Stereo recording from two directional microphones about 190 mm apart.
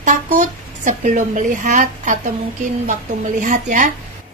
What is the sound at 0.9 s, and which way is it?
A woman's voice, 40° right (ahead or behind).